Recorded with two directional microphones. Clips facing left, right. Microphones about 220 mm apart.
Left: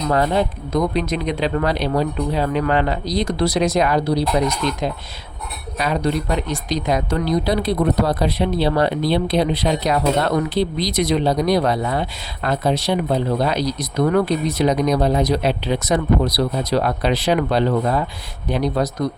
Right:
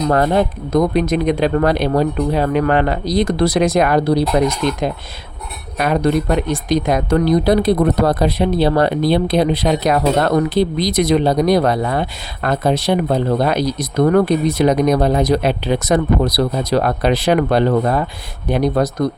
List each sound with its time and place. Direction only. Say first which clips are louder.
0.1 s speech: right 2 dB; 50° right (ahead or behind)